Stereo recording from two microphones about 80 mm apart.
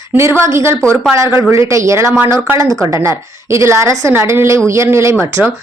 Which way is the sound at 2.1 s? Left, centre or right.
Right.